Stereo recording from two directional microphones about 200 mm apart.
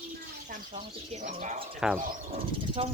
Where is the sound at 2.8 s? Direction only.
30° right (ahead or behind).